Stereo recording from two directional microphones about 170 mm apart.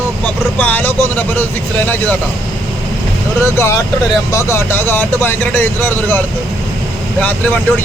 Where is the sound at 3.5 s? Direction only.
15° left (ahead or behind).